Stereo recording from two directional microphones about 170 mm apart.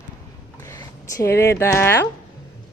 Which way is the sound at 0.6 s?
20° left (ahead or behind).